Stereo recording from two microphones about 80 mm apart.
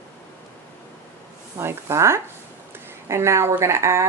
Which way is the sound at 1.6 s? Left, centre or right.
Right.